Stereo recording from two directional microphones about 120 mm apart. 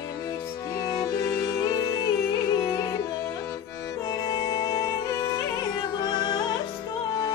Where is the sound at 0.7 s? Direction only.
30° left (ahead or behind).